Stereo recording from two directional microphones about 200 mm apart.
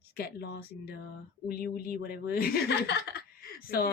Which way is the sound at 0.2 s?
50° left (ahead or behind).